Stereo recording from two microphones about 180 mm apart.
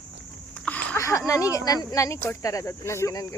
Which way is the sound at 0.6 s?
5° left (ahead or behind).